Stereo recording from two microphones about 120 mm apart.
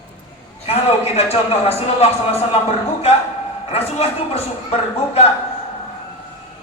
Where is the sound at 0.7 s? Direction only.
55° left (ahead or behind).